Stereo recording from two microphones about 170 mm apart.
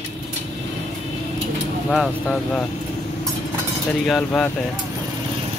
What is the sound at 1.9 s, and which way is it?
Speech, centre (ahead or behind).